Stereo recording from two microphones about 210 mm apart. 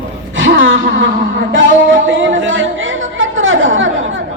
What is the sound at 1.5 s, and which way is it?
Chatter, 60° right (ahead or behind).